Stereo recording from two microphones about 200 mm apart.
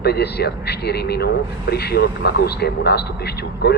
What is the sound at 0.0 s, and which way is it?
Speech, 55° left (ahead or behind).